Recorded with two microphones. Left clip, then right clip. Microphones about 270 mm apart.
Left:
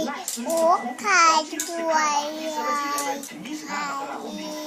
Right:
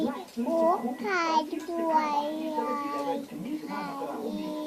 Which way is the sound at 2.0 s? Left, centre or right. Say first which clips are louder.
Left 5 dB; left.